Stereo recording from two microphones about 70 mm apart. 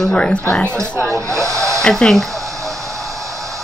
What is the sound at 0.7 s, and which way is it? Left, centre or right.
Speech, right.